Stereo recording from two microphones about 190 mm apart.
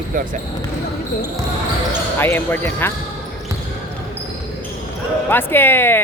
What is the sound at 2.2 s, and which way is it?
Speech, 10° left (ahead or behind).